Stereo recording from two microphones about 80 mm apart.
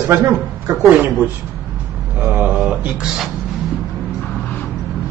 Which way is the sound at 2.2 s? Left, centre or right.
Right.